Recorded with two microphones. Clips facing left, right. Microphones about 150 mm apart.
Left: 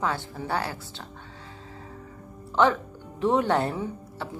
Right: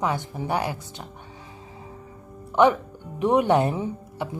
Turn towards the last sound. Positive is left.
turn(degrees=-15)  # may be behind; listen again after turning